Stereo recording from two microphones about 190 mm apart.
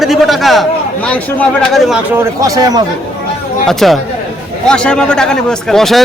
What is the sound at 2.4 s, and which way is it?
Speech, 20° right (ahead or behind).